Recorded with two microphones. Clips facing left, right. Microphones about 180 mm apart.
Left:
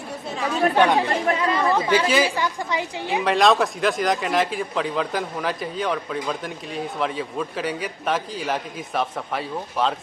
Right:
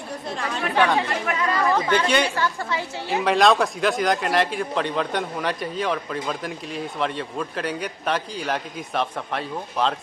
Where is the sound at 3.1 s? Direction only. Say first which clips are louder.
Even; centre (ahead or behind).